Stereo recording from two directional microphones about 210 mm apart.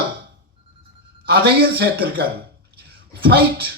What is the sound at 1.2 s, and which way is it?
A man's voice, 50° right (ahead or behind).